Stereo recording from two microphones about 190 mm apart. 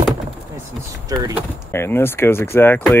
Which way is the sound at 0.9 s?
15° right (ahead or behind).